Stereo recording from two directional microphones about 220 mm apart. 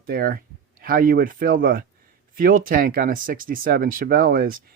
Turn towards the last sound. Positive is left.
turn(degrees=-40)  # may be behind; listen again after turning